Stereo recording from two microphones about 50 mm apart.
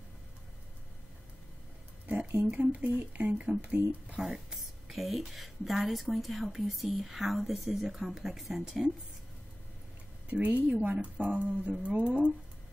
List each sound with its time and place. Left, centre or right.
2.0 s speech: right
4.5 s a woman's voice: centre
10.4 s speech: right